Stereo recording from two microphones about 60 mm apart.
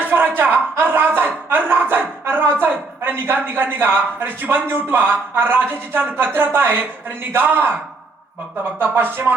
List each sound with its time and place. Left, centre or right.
0.0 s a man's voice: right
8.8 s a man's voice: right